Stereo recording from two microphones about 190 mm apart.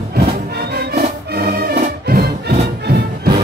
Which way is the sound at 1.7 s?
40° right (ahead or behind).